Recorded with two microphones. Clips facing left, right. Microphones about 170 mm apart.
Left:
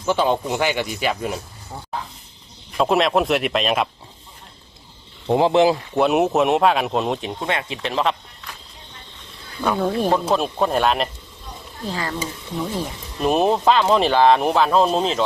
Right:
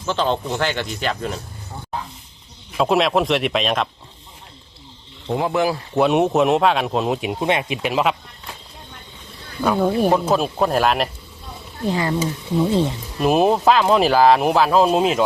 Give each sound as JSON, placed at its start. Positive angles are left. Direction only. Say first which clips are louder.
{"t": 0.0, "sound": "speech", "louder": "left 2 dB", "side_deg": 10}
{"t": 2.7, "sound": "speech", "louder": "even", "side_deg": 0}
{"t": 5.3, "sound": "speech", "louder": "left 4 dB", "side_deg": 25}
{"t": 5.9, "sound": "speech", "louder": "right 1 dB", "side_deg": 0}
{"t": 7.3, "sound": "speech", "louder": "right 4 dB", "side_deg": -20}
{"t": 9.6, "sound": "speech", "louder": "right 3 dB", "side_deg": -5}
{"t": 11.9, "sound": "speech", "louder": "right 6 dB", "side_deg": -20}
{"t": 13.1, "sound": "speech", "louder": "right 2 dB", "side_deg": -5}